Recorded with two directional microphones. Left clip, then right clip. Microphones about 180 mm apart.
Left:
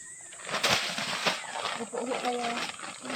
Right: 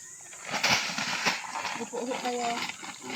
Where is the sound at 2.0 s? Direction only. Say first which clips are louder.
Left 2 dB; 10° left (ahead or behind).